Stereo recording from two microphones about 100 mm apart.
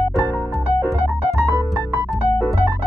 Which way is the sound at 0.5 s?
Centre (ahead or behind).